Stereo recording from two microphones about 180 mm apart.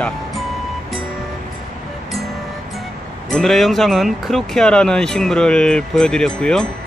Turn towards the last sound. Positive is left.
turn(degrees=5)  # may be behind; listen again after turning